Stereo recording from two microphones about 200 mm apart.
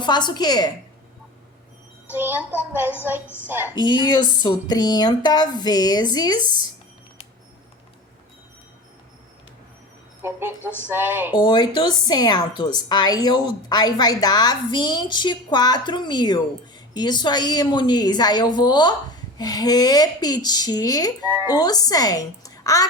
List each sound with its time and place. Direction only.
0.0 s a woman's voice: 20° left (ahead or behind)
2.1 s speech: 10° right (ahead or behind)
3.8 s a woman's voice: 20° left (ahead or behind)
10.6 s music: 10° left (ahead or behind)
10.8 s speech: 10° right (ahead or behind)
11.3 s a woman's voice: 20° left (ahead or behind)
21.2 s speech: 10° right (ahead or behind)
21.5 s speech: 20° left (ahead or behind)